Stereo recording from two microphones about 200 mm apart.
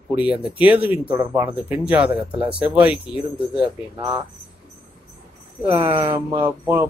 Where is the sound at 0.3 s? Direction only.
5° right (ahead or behind).